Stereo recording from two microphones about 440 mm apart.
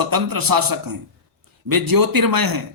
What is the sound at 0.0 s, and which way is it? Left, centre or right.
Speech, right.